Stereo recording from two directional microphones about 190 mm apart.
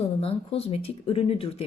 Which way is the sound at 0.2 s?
30° left (ahead or behind).